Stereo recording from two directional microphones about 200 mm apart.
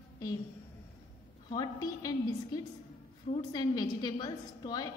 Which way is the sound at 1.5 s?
20° left (ahead or behind).